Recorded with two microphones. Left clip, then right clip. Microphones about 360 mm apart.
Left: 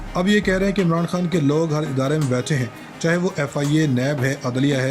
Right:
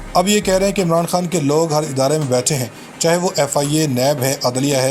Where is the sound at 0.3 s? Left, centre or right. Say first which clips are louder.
Right 4 dB; right.